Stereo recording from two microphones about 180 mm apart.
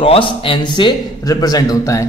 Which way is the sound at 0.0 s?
30° left (ahead or behind).